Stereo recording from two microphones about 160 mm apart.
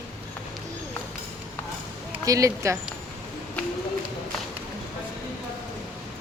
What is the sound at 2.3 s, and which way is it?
Speech, 20° right (ahead or behind).